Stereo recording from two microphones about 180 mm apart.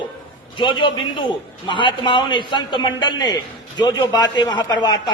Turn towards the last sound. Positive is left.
turn(degrees=20)  # may be behind; listen again after turning